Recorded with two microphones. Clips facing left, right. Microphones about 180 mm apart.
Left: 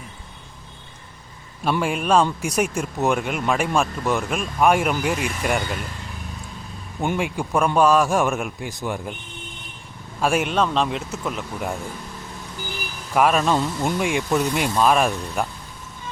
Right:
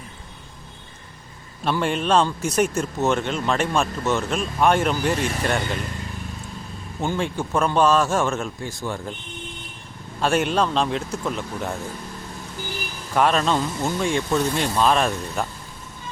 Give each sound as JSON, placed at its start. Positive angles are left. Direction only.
{"t": 1.8, "sound": "speech", "side_deg": 10}
{"t": 7.0, "sound": "speech", "side_deg": 15}
{"t": 10.2, "sound": "speech", "side_deg": 5}
{"t": 13.1, "sound": "speech", "side_deg": 10}